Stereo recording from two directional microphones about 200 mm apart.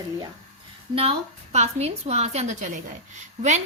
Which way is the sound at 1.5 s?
35° right (ahead or behind).